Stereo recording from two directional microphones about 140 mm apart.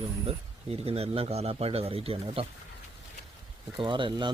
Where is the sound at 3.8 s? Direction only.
35° right (ahead or behind).